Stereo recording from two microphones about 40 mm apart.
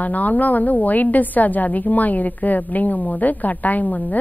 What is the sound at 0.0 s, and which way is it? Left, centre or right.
A woman's voice, left.